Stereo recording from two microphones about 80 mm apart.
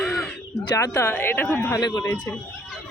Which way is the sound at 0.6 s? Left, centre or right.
Left.